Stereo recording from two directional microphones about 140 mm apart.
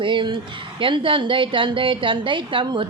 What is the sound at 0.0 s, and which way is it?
A woman's voice, 35° right (ahead or behind).